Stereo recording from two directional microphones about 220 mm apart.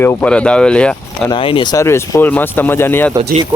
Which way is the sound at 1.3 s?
25° left (ahead or behind).